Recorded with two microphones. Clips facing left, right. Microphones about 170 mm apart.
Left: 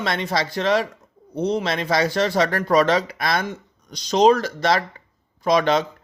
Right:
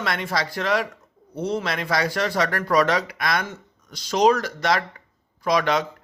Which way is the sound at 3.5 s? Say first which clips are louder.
Left 5 dB; 20° left (ahead or behind).